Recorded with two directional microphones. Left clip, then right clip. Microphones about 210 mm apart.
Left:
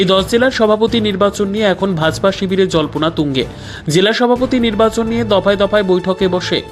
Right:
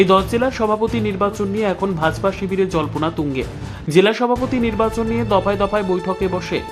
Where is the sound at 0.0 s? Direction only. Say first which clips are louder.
Left 3 dB; 15° left (ahead or behind).